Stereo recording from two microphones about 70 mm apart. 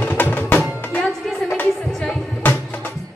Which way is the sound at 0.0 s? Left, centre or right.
Left.